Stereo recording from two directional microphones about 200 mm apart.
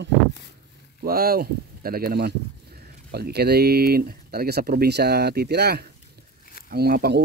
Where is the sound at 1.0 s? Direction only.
50° right (ahead or behind).